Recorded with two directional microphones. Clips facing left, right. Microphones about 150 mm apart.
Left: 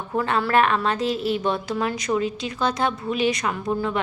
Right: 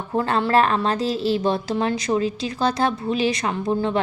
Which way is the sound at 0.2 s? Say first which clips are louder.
Right 1 dB; 30° right (ahead or behind).